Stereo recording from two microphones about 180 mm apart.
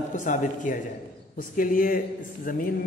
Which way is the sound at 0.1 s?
45° left (ahead or behind).